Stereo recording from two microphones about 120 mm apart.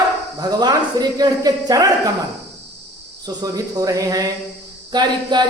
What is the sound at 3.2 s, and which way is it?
Speech, 30° right (ahead or behind).